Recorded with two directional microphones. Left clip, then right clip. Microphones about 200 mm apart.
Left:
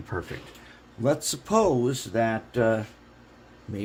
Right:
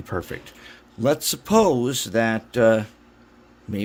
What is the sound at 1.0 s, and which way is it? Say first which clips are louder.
Speech: right 4 dB; 45° right (ahead or behind).